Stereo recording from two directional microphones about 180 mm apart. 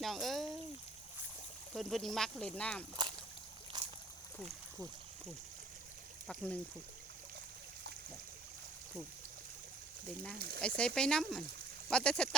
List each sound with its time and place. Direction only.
0.0 s speech: centre (ahead or behind)
1.7 s speech: centre (ahead or behind)
3.7 s a sound: 25° right (ahead or behind)
6.2 s speech: 5° left (ahead or behind)
10.3 s speech: 60° right (ahead or behind)
10.8 s speech: 5° left (ahead or behind)